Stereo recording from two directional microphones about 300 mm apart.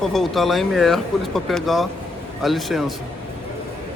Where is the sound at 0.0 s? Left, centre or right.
Centre.